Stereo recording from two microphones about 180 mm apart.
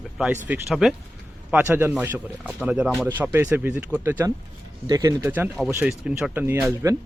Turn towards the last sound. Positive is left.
turn(degrees=-15)  # may be behind; listen again after turning